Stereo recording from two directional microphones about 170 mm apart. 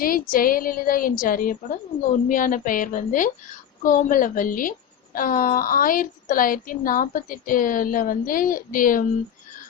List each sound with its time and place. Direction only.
0.0 s a woman's voice: 55° left (ahead or behind)